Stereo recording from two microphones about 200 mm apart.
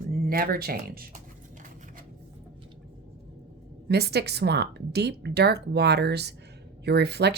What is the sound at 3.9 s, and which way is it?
A woman's voice, 55° right (ahead or behind).